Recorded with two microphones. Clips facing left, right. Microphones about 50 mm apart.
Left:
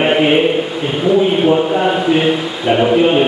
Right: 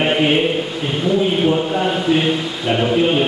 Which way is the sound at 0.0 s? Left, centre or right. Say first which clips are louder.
Left 4 dB; centre.